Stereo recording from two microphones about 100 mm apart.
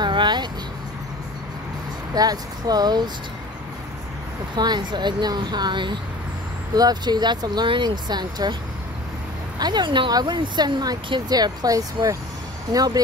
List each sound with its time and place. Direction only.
0.0 s vehicle: 50° right (ahead or behind)
2.1 s speech: 40° right (ahead or behind)
4.6 s speech: 45° right (ahead or behind)
9.6 s speech: 45° right (ahead or behind)